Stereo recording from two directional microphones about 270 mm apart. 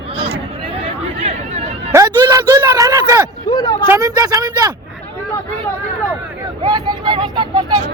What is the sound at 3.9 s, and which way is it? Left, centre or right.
Speech, centre.